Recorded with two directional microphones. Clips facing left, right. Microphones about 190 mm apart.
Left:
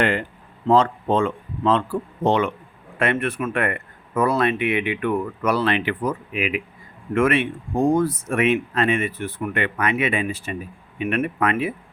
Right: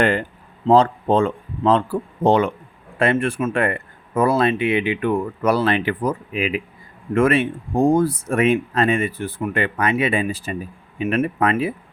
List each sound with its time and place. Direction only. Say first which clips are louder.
0.0 s speech: right 3 dB; 40° right (ahead or behind)